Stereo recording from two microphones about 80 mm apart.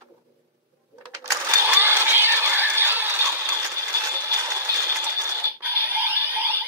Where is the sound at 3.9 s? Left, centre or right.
Right.